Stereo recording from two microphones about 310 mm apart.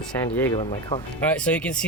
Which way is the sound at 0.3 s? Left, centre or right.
Centre.